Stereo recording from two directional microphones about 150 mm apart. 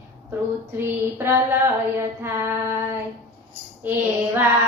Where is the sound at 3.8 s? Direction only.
15° right (ahead or behind).